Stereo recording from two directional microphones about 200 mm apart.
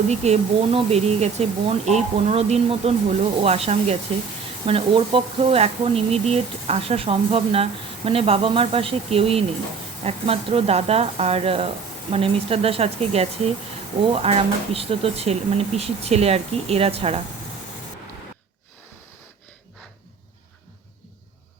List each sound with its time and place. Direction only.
0.1 s speech: 35° right (ahead or behind)